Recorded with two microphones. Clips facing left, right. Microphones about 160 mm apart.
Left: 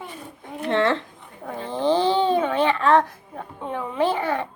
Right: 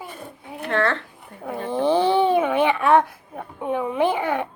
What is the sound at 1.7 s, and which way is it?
Speech, 15° right (ahead or behind).